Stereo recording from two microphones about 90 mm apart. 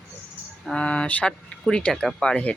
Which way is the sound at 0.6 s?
10° left (ahead or behind).